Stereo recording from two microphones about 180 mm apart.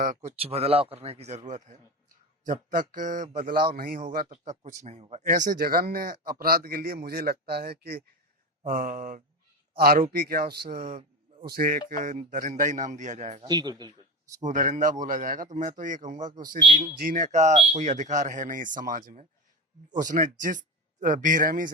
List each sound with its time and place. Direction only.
0.0 s a man's voice: 45° right (ahead or behind); by 8.0 s 60° right (ahead or behind)
8.6 s a man's voice: 50° right (ahead or behind)
13.5 s speech: 25° right (ahead or behind)
14.4 s speech: 45° right (ahead or behind)